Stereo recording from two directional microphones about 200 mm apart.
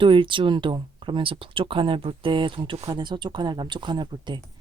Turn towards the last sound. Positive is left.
turn(degrees=-20)  # may be behind; listen again after turning